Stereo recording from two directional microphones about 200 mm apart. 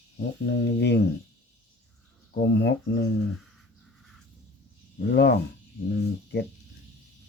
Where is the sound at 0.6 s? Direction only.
55° left (ahead or behind).